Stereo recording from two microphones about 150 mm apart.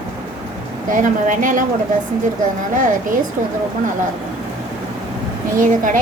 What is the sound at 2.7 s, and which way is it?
Speech, 60° right (ahead or behind).